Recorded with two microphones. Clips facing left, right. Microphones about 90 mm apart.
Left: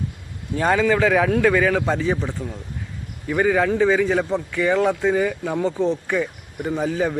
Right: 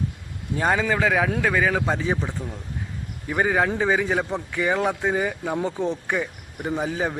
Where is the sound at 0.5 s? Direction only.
15° right (ahead or behind).